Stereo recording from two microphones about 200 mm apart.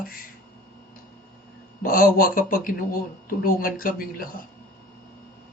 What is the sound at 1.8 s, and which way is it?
Speech, 45° left (ahead or behind).